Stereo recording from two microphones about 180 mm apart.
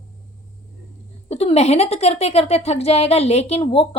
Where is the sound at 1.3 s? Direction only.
35° left (ahead or behind).